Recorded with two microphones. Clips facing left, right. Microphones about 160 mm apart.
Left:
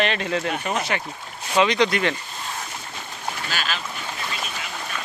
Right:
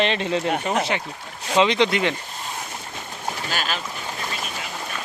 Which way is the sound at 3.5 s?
45° right (ahead or behind).